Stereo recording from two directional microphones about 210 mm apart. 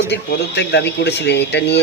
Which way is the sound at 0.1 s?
55° left (ahead or behind).